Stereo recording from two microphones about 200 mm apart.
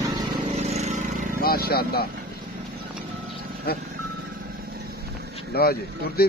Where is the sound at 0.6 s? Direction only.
35° right (ahead or behind).